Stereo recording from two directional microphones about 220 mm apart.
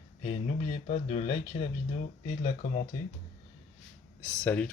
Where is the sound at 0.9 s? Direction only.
30° left (ahead or behind).